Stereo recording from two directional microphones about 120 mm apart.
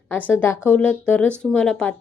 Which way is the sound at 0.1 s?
15° left (ahead or behind).